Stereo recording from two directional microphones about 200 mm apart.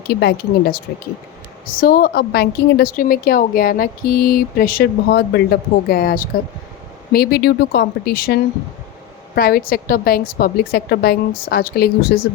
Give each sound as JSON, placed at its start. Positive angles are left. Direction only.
{"t": 0.1, "sound": "a woman's voice", "side_deg": 55}